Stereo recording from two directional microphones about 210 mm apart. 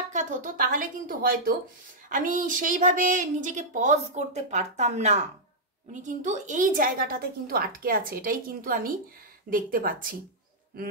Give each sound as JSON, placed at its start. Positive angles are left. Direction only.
{"t": 0.1, "sound": "a woman's voice", "side_deg": -35}